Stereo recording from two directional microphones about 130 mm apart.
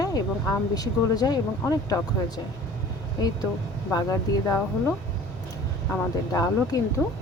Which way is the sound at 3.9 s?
25° left (ahead or behind).